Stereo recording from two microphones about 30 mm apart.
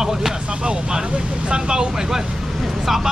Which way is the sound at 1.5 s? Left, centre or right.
Right.